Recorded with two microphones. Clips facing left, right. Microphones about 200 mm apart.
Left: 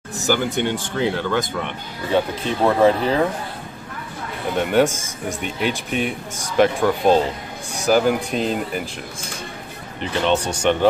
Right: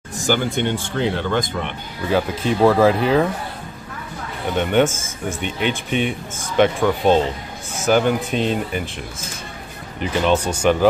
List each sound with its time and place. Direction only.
0.3 s speech: 10° left (ahead or behind)
4.6 s speech: 5° left (ahead or behind)
4.8 s speech: 15° left (ahead or behind)
5.4 s speech: 5° left (ahead or behind)
9.9 s speech: 5° right (ahead or behind)